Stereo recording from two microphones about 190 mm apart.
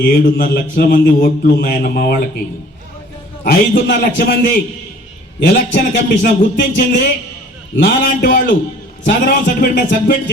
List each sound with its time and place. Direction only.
0.0 s a man's voice: 50° left (ahead or behind)
3.4 s a man's voice: 55° left (ahead or behind)